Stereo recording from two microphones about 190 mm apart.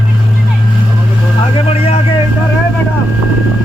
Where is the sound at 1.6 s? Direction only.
30° left (ahead or behind).